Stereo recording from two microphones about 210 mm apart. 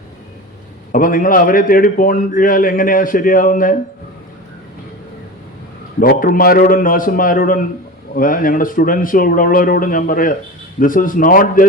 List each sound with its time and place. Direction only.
0.9 s a man's voice: 40° left (ahead or behind)
6.0 s a man's voice: 40° left (ahead or behind)